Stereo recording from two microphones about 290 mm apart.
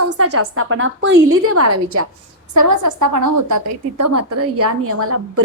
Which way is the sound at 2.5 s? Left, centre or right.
Right.